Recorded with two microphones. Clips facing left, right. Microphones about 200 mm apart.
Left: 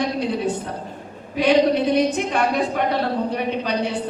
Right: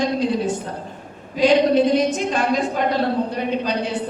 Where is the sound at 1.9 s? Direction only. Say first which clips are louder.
Even; 60° left (ahead or behind).